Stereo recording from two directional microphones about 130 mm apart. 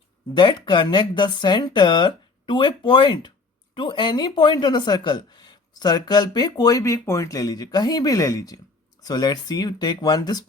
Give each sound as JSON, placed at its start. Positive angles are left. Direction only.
{"t": 0.3, "sound": "a woman's voice", "side_deg": 35}